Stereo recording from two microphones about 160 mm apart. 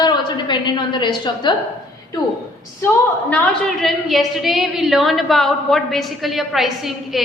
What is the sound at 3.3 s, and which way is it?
A woman's voice, 5° left (ahead or behind).